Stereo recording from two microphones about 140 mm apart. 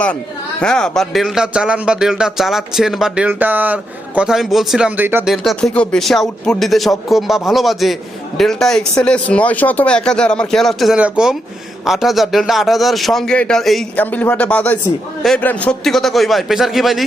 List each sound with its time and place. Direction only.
0.6 s a man's voice: 5° left (ahead or behind); by 5.2 s 15° right (ahead or behind)
5.2 s a man's voice: centre (ahead or behind)